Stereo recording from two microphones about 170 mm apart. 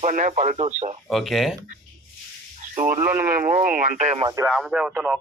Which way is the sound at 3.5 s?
50° right (ahead or behind).